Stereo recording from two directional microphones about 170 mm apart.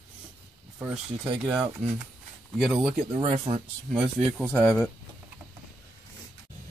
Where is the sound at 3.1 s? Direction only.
35° right (ahead or behind).